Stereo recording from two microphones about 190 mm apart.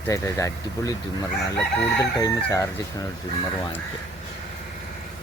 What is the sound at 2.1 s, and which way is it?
Speech, 15° left (ahead or behind).